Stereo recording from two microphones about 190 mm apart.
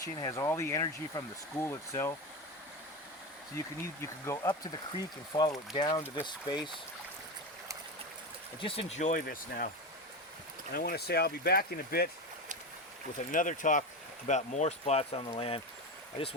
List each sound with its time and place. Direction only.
0.0 s speech: 15° left (ahead or behind)
4.0 s speech: 15° left (ahead or behind)
8.6 s speech: 30° left (ahead or behind); by 9.6 s 50° left (ahead or behind)
10.8 s speech: 55° left (ahead or behind)
13.1 s speech: 45° left (ahead or behind)